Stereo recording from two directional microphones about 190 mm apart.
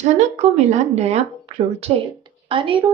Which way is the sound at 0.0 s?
35° right (ahead or behind).